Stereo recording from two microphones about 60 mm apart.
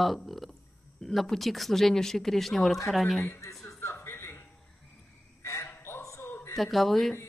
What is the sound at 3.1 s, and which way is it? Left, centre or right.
Speech, left.